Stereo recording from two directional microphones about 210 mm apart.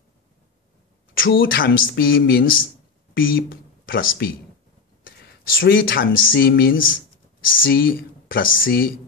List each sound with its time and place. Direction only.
1.1 s speech: 45° left (ahead or behind)